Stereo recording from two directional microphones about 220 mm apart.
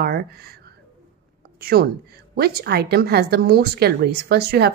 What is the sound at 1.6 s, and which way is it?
A woman's voice, 45° right (ahead or behind).